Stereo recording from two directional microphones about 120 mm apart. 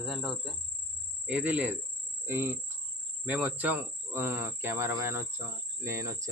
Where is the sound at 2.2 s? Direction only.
20° right (ahead or behind).